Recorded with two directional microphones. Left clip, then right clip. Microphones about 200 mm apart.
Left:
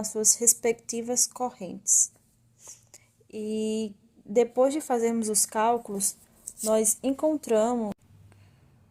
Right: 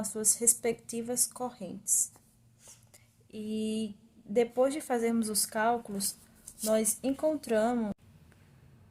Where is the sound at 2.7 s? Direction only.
20° left (ahead or behind).